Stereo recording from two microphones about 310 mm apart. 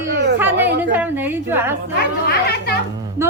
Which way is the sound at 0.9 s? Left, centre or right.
Centre.